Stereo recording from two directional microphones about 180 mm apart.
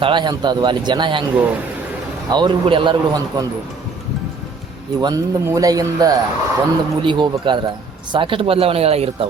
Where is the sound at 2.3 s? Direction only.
25° right (ahead or behind).